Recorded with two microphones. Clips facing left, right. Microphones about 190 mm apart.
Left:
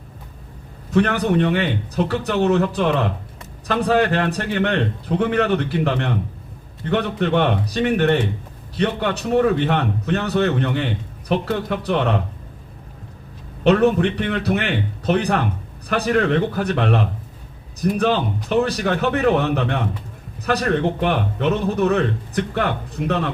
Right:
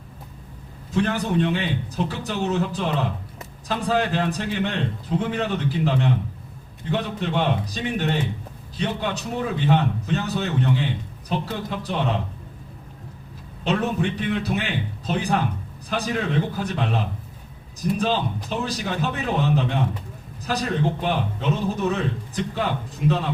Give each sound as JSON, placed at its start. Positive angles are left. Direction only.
{"t": 0.9, "sound": "a man's voice", "side_deg": 65}
{"t": 13.7, "sound": "a man's voice", "side_deg": 65}